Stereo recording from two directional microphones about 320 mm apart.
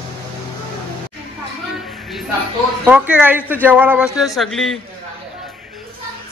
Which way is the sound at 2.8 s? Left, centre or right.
Centre.